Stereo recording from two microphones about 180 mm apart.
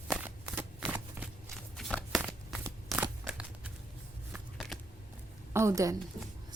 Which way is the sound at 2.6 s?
10° right (ahead or behind).